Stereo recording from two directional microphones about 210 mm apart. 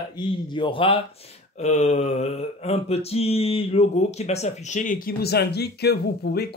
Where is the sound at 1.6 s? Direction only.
30° left (ahead or behind).